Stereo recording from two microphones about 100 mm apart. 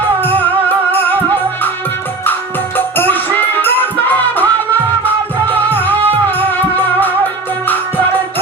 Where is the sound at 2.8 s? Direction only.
20° left (ahead or behind).